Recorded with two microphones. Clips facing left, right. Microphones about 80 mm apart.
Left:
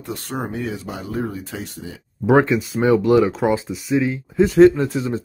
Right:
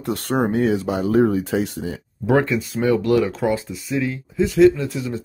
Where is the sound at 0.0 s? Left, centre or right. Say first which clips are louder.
Right 7 dB; right.